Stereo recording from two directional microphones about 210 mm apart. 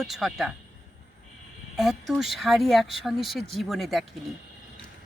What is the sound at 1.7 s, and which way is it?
Speech, centre (ahead or behind).